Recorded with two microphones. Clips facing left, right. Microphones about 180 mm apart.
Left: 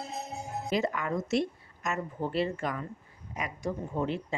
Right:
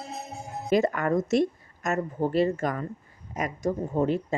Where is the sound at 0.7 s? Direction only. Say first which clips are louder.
Right 7 dB; 50° right (ahead or behind).